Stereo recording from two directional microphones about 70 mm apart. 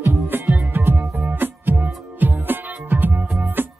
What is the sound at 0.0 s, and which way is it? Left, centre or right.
Music, right.